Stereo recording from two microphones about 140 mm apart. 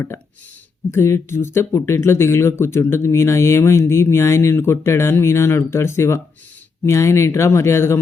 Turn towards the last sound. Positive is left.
turn(degrees=20)  # may be behind; listen again after turning